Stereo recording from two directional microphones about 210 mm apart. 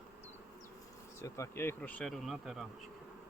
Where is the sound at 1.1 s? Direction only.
15° left (ahead or behind); by 2.7 s centre (ahead or behind).